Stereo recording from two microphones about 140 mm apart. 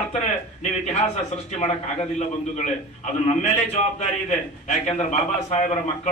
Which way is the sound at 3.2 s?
50° left (ahead or behind).